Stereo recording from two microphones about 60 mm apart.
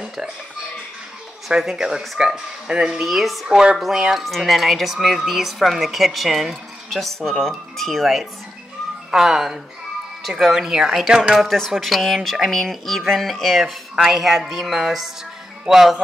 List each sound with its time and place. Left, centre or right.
1.5 s speech: centre
3.4 s speech: centre
3.7 s speech: centre
11.3 s speech: centre